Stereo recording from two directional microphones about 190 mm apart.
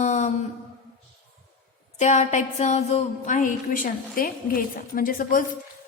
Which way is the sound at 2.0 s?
40° left (ahead or behind).